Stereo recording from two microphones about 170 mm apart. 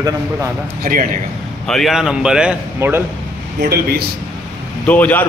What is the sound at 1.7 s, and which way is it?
A man's voice, centre (ahead or behind).